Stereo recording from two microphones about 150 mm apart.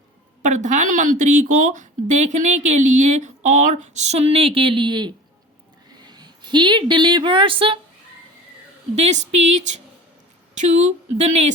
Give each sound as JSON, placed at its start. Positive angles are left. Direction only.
{"t": 0.4, "sound": "a woman's voice", "side_deg": -55}
{"t": 9.0, "sound": "speech", "side_deg": -50}